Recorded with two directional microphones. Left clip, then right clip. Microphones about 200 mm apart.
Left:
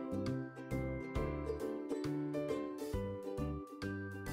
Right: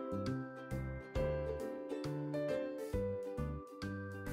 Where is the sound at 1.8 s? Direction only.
5° left (ahead or behind).